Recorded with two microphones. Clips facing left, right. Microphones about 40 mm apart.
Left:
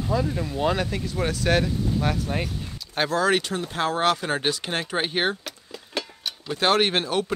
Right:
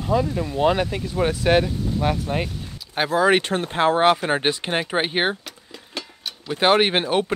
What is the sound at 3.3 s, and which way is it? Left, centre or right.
Speech, right.